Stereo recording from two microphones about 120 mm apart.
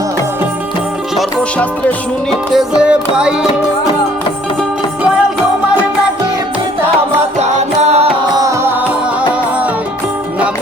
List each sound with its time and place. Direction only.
2.5 s music: 5° right (ahead or behind)
7.3 s music: 65° right (ahead or behind)
8.4 s music: 25° right (ahead or behind)